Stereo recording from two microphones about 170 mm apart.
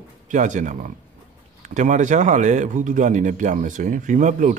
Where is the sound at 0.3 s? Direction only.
45° right (ahead or behind).